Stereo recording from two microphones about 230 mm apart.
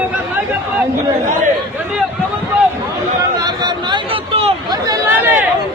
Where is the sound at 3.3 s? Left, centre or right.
Centre.